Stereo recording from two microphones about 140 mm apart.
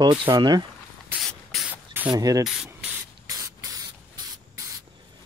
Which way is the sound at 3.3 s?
25° right (ahead or behind).